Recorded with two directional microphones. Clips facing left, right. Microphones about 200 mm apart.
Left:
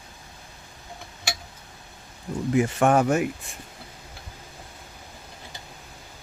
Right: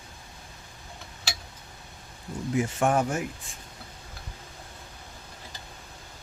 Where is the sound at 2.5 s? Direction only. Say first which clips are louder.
Left 5 dB; 70° left (ahead or behind).